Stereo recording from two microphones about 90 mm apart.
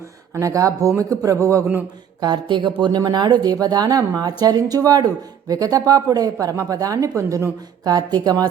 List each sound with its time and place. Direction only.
0.3 s speech: 35° right (ahead or behind)
2.2 s speech: 60° right (ahead or behind)
2.8 s speech: 45° right (ahead or behind)